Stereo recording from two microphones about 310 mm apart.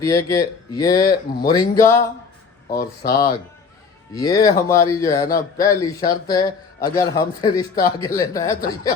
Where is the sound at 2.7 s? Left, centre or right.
Left.